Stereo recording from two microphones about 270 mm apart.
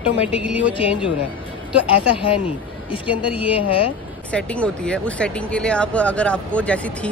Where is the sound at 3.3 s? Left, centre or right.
Centre.